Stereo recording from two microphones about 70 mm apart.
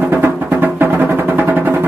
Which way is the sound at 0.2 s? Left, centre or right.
Right.